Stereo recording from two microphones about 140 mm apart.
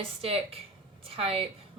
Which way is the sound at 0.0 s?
45° right (ahead or behind).